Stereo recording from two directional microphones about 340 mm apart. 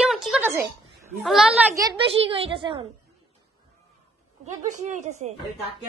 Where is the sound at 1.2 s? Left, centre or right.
Centre.